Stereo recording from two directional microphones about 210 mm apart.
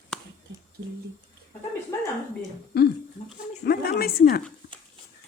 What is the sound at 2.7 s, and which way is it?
Speech, 50° left (ahead or behind).